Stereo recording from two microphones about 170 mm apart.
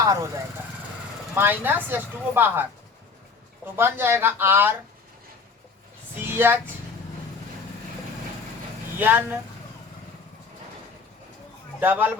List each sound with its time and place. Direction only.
0.0 s speech: 20° right (ahead or behind)
1.4 s speech: 10° right (ahead or behind)
3.8 s speech: 15° right (ahead or behind)
6.2 s a sound: 10° right (ahead or behind)
9.0 s speech: 10° right (ahead or behind)
11.8 s speech: 10° right (ahead or behind)